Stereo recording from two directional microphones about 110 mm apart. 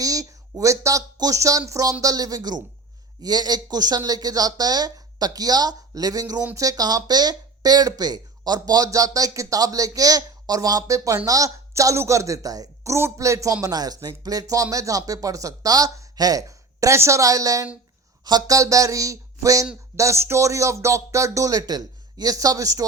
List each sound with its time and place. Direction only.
0.0 s a woman's voice: 30° right (ahead or behind)